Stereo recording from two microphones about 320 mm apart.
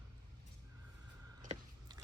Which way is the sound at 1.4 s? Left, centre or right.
Right.